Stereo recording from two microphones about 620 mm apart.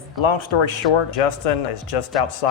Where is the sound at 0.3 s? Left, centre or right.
Left.